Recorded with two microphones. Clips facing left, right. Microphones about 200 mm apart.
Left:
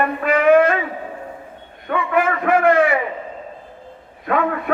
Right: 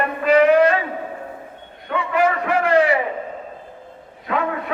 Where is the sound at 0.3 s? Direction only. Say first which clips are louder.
Right 1 dB; 55° left (ahead or behind).